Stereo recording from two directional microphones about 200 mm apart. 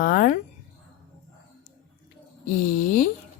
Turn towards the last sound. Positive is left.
turn(degrees=40)  # may be behind; listen again after turning